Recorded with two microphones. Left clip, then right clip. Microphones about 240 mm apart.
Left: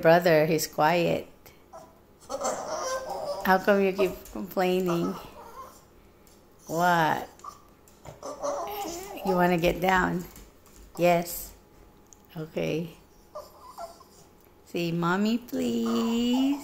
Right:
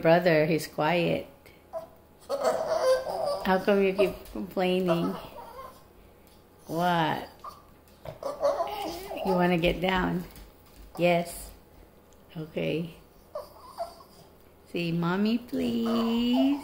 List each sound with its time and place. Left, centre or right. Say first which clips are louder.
0.0 s speech: left 2 dB; centre
2.2 s laughter: right 4 dB; centre
3.4 s speech: left 3 dB; centre
6.7 s speech: left 3 dB; centre
8.0 s a sound: right 6 dB; centre
8.6 s a sound: right 1 dB; centre
11.0 s speech: left 2 dB; centre
14.7 s speech: left 3 dB; centre